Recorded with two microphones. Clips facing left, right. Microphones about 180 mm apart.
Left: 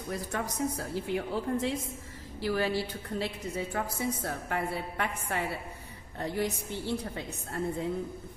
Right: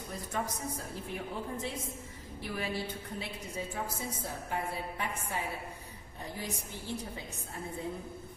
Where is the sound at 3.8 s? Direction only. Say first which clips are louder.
Left 6 dB; 65° left (ahead or behind).